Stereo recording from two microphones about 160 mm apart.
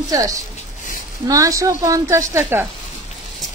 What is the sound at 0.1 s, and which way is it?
Speech, 20° right (ahead or behind).